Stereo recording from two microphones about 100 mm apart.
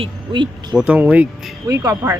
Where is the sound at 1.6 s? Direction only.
35° right (ahead or behind).